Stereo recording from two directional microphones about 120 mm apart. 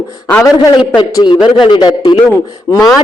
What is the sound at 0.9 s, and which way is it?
A man's voice, 35° left (ahead or behind).